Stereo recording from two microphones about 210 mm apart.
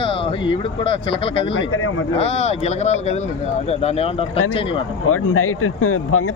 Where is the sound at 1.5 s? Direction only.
75° left (ahead or behind).